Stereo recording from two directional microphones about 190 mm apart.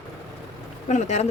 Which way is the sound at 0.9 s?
35° left (ahead or behind).